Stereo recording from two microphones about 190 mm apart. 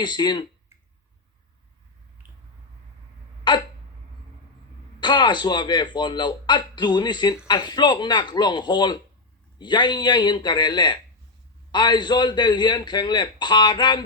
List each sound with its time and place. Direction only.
0.0 s speech: 25° left (ahead or behind)
3.5 s hiccup: 25° left (ahead or behind)
4.9 s speech: 25° left (ahead or behind)